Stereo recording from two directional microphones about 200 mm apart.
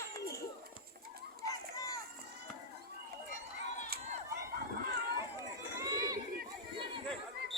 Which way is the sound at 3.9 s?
50° right (ahead or behind).